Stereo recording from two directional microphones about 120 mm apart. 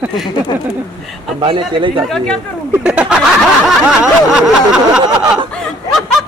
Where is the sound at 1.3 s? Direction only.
40° right (ahead or behind).